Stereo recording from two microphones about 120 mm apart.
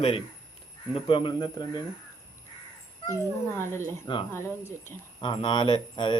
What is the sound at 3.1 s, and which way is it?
Speech, 20° left (ahead or behind).